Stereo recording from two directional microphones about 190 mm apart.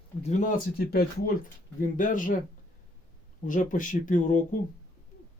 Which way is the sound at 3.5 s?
45° left (ahead or behind).